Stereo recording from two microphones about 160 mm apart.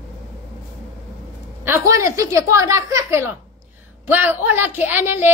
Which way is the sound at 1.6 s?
15° right (ahead or behind).